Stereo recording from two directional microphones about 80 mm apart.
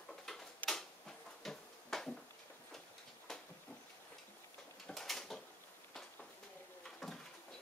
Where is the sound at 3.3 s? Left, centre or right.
Centre.